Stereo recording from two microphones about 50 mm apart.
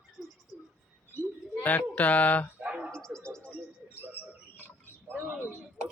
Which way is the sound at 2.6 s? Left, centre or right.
Right.